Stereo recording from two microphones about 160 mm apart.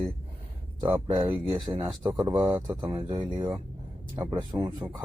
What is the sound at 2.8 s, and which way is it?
Speech, 30° right (ahead or behind).